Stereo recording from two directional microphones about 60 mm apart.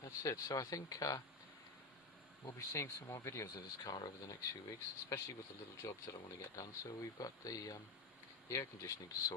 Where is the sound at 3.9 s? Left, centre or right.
Left.